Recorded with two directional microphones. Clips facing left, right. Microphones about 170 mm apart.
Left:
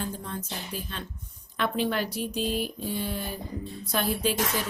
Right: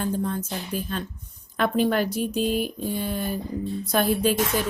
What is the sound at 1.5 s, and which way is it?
Speech, 45° right (ahead or behind).